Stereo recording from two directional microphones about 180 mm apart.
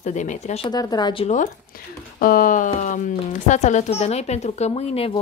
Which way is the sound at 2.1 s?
50° left (ahead or behind).